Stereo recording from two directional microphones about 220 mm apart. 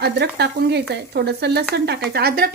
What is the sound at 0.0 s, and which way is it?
Speech, 50° right (ahead or behind).